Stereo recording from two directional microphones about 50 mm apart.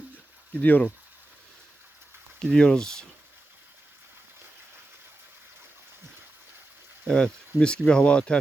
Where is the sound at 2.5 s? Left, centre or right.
Centre.